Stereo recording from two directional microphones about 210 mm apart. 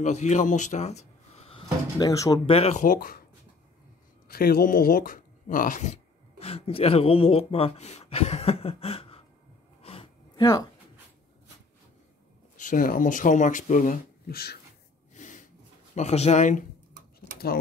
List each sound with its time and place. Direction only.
0.0 s speech: 35° left (ahead or behind); by 2.5 s 15° left (ahead or behind)
2.5 s speech: 30° left (ahead or behind)
4.3 s speech: 45° left (ahead or behind); by 9.2 s 25° left (ahead or behind)
9.8 s a sound: 25° left (ahead or behind)
12.5 s speech: 40° left (ahead or behind)
15.1 s a sound: 35° left (ahead or behind)
15.9 s speech: 30° left (ahead or behind)